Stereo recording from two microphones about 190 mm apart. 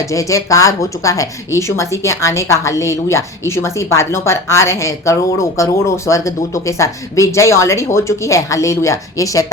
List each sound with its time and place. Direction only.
0.0 s a woman's voice: 15° left (ahead or behind)